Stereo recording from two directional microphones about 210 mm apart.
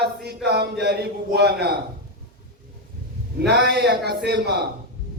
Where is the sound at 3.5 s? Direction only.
50° right (ahead or behind).